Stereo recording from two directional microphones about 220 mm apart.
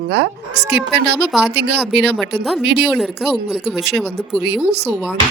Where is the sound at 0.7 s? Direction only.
50° right (ahead or behind).